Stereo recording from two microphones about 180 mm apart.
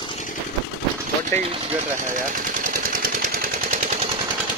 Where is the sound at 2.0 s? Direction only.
45° right (ahead or behind).